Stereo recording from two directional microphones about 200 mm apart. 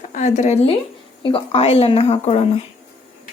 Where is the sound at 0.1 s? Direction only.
35° left (ahead or behind).